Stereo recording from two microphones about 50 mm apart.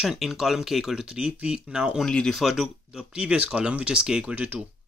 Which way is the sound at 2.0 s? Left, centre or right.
Centre.